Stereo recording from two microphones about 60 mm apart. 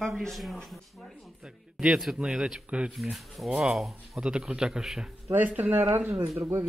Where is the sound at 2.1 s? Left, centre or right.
Centre.